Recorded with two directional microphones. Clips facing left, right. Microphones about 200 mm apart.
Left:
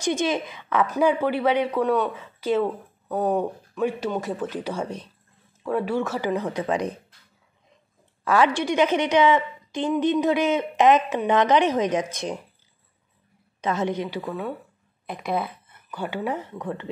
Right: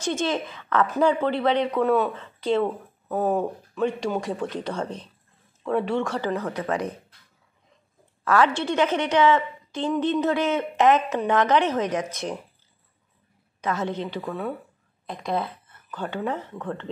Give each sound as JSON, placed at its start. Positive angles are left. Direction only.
{"t": 0.0, "sound": "a woman's voice", "side_deg": 15}
{"t": 1.8, "sound": "speech", "side_deg": -5}
{"t": 2.1, "sound": "a woman's voice", "side_deg": 5}
{"t": 8.2, "sound": "a woman's voice", "side_deg": 15}
{"t": 13.6, "sound": "a woman's voice", "side_deg": 20}